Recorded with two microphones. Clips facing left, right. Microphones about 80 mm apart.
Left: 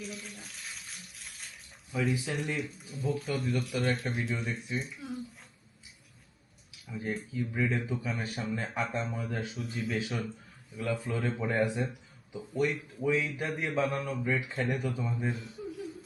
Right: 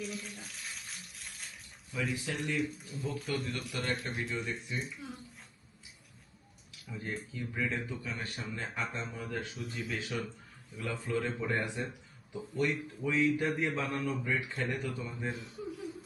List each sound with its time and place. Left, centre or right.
0.0 s a sound: centre
2.3 s speech: centre
6.8 s speech: centre
7.9 s speech: centre
15.3 s chuckle: centre